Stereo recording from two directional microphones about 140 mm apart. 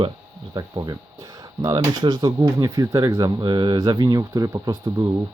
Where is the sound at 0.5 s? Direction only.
30° right (ahead or behind).